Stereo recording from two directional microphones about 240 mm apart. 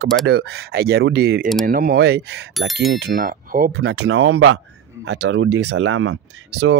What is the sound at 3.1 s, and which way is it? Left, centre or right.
Speech, right.